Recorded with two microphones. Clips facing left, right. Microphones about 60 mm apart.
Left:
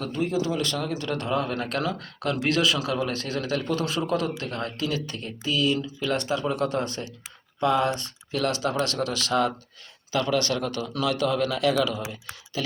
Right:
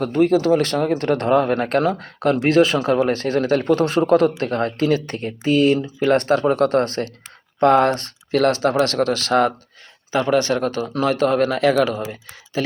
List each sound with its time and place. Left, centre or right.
0.0 s speech: right
10.1 s speech: right
12.6 s speech: right